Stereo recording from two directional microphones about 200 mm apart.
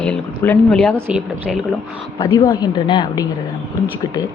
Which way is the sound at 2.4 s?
20° left (ahead or behind).